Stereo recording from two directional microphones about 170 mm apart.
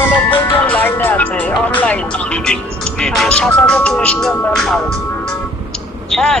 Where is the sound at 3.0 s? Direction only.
Centre (ahead or behind).